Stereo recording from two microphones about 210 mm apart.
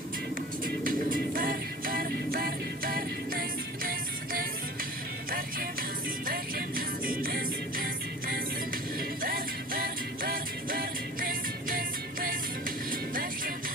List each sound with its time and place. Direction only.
0.6 s music: 40° right (ahead or behind)
6.2 s music: 45° right (ahead or behind)